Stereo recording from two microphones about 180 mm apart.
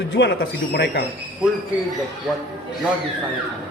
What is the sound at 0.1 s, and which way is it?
Speech, 75° left (ahead or behind).